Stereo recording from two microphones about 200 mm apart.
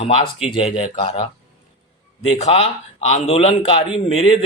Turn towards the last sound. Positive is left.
turn(degrees=30)  # may be behind; listen again after turning